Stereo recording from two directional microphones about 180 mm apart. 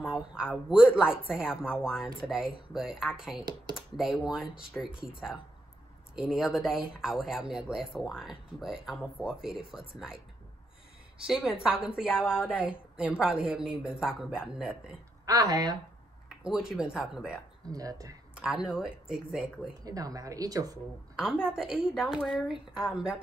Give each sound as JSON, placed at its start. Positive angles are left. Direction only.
{"t": 0.1, "sound": "speech", "side_deg": -5}
{"t": 11.2, "sound": "speech", "side_deg": -5}
{"t": 12.1, "sound": "speech", "side_deg": 10}
{"t": 12.4, "sound": "speech", "side_deg": -5}
{"t": 15.2, "sound": "speech", "side_deg": -20}
{"t": 16.4, "sound": "speech", "side_deg": -5}
{"t": 17.6, "sound": "speech", "side_deg": -20}
{"t": 18.3, "sound": "speech", "side_deg": -5}
{"t": 19.8, "sound": "speech", "side_deg": -20}
{"t": 21.2, "sound": "speech", "side_deg": -5}